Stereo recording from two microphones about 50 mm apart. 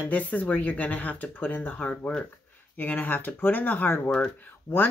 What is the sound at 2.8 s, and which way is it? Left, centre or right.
Speech, left.